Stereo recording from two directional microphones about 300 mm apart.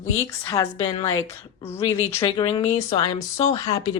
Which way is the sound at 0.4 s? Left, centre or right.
Centre.